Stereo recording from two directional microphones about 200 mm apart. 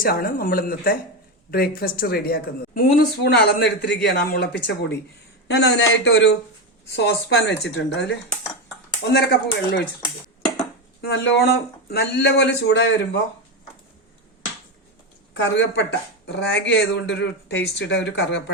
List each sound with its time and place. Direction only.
0.0 s a woman's voice: 45° left (ahead or behind)
11.0 s speech: 55° left (ahead or behind)
15.4 s speech: 65° left (ahead or behind)